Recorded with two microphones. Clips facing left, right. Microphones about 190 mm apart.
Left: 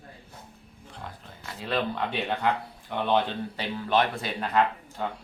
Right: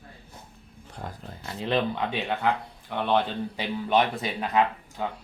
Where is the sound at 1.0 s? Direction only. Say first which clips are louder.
Right 4 dB; 45° right (ahead or behind); by 2.0 s 25° right (ahead or behind).